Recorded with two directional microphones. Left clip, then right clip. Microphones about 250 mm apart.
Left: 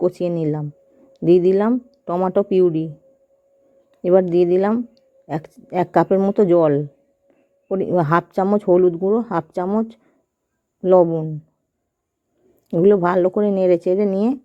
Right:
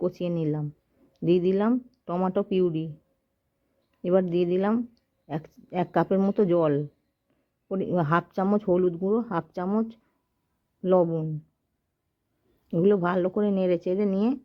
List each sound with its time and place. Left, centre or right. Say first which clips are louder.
0.2 s speech: left 7 dB; centre
3.9 s speech: left 9 dB; centre
12.7 s speech: left 8 dB; centre